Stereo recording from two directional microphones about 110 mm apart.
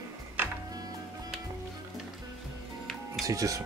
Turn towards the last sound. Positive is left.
turn(degrees=-30)  # may be behind; listen again after turning